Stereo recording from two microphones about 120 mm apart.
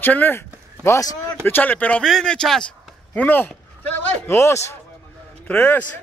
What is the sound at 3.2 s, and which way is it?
A man's voice, 15° left (ahead or behind).